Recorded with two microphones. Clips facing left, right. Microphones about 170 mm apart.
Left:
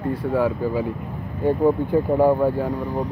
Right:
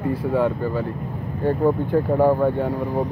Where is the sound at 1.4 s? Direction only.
10° left (ahead or behind).